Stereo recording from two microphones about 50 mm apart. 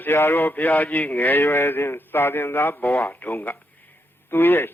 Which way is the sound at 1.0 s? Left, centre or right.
Left.